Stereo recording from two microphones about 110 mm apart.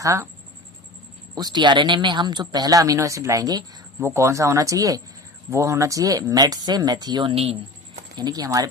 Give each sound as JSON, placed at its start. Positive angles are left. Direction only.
{"t": 0.0, "sound": "speech", "side_deg": -30}
{"t": 1.4, "sound": "speech", "side_deg": -40}